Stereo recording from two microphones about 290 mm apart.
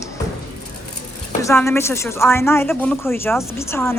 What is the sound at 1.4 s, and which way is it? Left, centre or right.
Speech, centre.